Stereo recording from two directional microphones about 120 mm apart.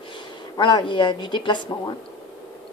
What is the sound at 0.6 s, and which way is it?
A woman's voice, 40° left (ahead or behind).